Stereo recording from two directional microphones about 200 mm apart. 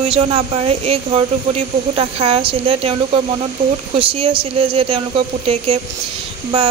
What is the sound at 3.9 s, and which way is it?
Speech, 25° right (ahead or behind).